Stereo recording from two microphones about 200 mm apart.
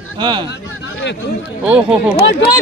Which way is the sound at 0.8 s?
60° left (ahead or behind).